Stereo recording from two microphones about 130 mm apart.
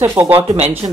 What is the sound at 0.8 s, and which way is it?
Speech, 40° right (ahead or behind).